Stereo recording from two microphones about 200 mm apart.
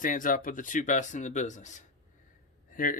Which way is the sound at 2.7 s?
40° left (ahead or behind).